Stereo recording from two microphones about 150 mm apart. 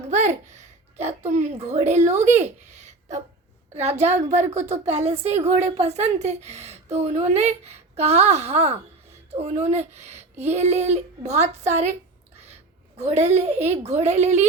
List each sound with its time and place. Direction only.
0.1 s babbling: 50° right (ahead or behind)
1.3 s a woman's voice: 50° right (ahead or behind)
13.0 s a woman's voice: 45° right (ahead or behind)